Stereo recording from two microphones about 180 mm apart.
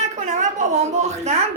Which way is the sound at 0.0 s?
40° right (ahead or behind).